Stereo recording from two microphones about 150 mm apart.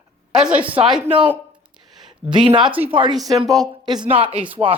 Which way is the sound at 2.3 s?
30° right (ahead or behind).